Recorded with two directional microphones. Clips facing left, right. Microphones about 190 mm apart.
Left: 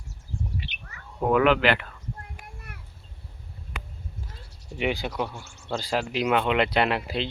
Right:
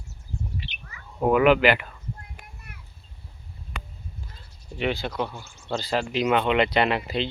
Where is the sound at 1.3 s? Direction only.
5° right (ahead or behind).